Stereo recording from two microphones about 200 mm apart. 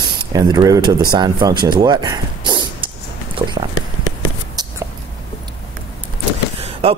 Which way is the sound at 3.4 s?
25° right (ahead or behind).